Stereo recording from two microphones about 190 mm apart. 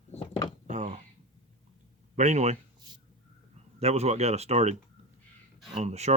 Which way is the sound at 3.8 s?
35° right (ahead or behind).